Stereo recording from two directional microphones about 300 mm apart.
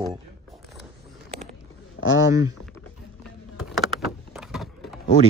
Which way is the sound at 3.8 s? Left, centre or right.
Centre.